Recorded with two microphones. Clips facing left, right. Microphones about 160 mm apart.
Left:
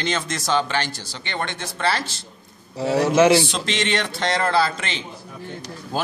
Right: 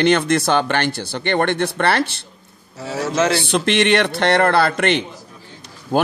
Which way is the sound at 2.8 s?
15° left (ahead or behind).